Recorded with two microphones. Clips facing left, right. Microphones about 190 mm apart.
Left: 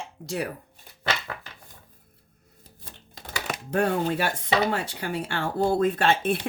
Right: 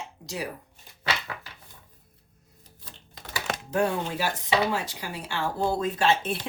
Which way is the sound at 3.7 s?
55° left (ahead or behind).